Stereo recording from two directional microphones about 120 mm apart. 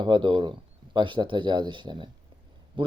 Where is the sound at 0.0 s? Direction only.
40° right (ahead or behind).